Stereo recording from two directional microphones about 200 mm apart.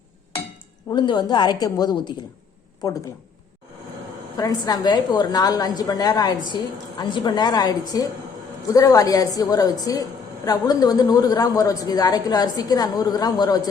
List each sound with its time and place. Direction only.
0.9 s a woman's voice: 20° left (ahead or behind)
4.4 s a woman's voice: 20° left (ahead or behind)